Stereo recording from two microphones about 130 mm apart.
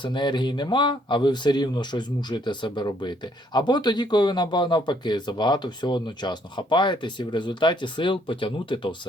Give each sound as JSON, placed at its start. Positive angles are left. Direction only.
{"t": 0.0, "sound": "speech", "side_deg": 35}